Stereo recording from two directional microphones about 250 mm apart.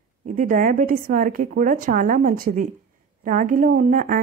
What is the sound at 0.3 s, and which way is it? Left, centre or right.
Speech, right.